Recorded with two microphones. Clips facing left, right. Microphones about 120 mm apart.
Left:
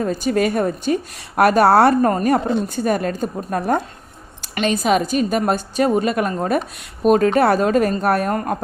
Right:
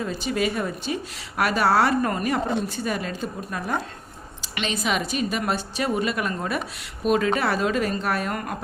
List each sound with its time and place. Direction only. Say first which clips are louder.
0.0 s a woman's voice: left 7 dB; 45° left (ahead or behind)